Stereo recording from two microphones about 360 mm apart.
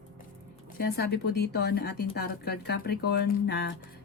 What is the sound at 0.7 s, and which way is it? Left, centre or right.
Speech, left.